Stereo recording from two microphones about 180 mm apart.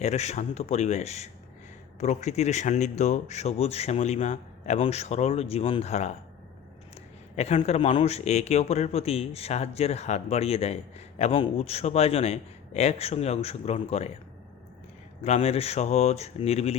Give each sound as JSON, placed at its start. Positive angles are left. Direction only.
{"t": 0.0, "sound": "a man's voice", "side_deg": 40}
{"t": 7.3, "sound": "a man's voice", "side_deg": 35}
{"t": 15.2, "sound": "a man's voice", "side_deg": 35}